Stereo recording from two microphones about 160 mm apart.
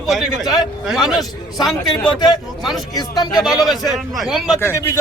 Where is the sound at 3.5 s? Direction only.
Centre (ahead or behind).